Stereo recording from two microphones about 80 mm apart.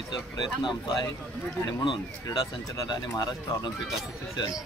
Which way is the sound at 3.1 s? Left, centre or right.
Left.